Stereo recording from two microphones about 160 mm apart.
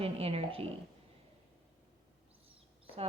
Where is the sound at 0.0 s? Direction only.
40° right (ahead or behind).